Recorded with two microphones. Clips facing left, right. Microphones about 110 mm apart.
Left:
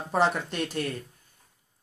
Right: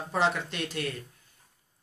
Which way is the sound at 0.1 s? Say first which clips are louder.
Left 3 dB; 45° left (ahead or behind).